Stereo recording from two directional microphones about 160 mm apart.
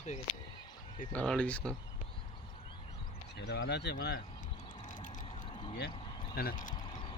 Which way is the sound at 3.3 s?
90° left.